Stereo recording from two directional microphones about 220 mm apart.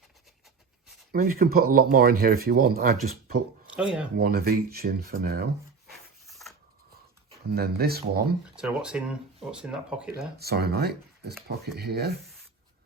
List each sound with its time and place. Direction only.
1.1 s speech: 40° right (ahead or behind)
3.8 s speech: 5° right (ahead or behind)
4.2 s speech: 45° right (ahead or behind)
5.9 s a sound: centre (ahead or behind)
7.4 s speech: 45° right (ahead or behind)
8.5 s speech: 5° right (ahead or behind)
10.3 s speech: 45° right (ahead or behind)